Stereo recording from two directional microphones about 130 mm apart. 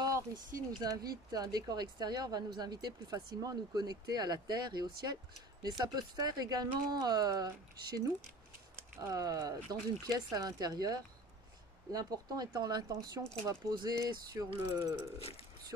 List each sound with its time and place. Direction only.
0.0 s speech: 25° right (ahead or behind)
15.1 s speech: 50° left (ahead or behind)